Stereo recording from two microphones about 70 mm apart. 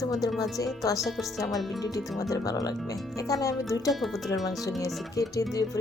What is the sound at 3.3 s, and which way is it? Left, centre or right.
Speech, left.